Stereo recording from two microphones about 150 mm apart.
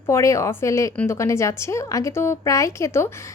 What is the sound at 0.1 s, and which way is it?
A woman's voice, 20° left (ahead or behind).